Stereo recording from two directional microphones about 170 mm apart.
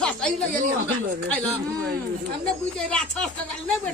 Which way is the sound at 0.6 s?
50° right (ahead or behind).